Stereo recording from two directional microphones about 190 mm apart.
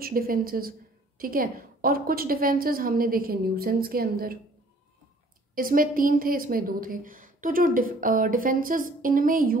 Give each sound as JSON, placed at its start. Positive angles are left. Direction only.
{"t": 0.0, "sound": "a woman's voice", "side_deg": -50}
{"t": 5.5, "sound": "a woman's voice", "side_deg": -50}